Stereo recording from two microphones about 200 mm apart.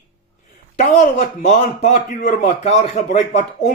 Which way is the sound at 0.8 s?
40° left (ahead or behind).